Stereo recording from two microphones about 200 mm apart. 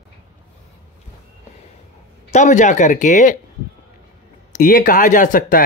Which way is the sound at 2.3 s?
35° left (ahead or behind).